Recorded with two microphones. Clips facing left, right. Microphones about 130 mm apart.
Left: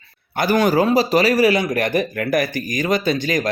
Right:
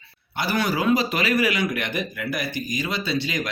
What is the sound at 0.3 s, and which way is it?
A man's voice, 45° left (ahead or behind).